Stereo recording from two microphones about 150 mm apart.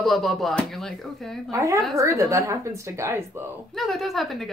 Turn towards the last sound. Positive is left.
turn(degrees=0)  # may be behind; listen again after turning